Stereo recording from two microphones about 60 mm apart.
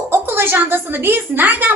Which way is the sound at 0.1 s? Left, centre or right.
Right.